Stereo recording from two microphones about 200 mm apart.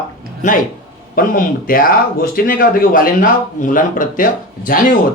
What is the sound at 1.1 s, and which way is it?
A man's voice, 45° left (ahead or behind).